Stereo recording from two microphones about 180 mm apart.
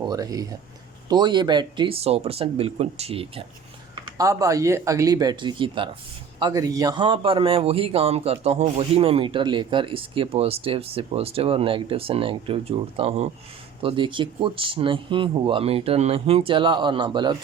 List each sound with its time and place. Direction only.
0.0 s a man's voice: 20° right (ahead or behind)
3.9 s a man's voice: 20° right (ahead or behind)